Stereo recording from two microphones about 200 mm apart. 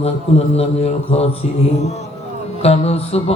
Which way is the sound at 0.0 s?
30° left (ahead or behind).